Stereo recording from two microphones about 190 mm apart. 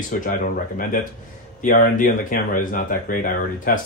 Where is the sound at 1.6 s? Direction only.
45° left (ahead or behind).